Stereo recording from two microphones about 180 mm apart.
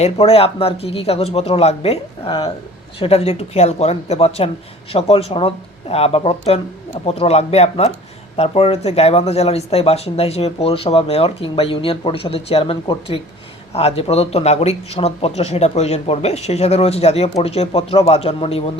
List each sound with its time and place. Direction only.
0.0 s speech: 35° left (ahead or behind)